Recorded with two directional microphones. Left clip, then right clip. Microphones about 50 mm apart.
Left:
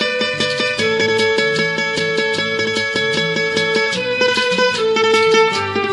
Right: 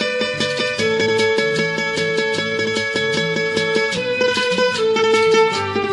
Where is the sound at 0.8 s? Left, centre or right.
Right.